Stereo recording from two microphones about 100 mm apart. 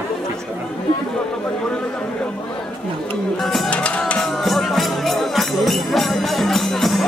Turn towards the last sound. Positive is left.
turn(degrees=0)  # may be behind; listen again after turning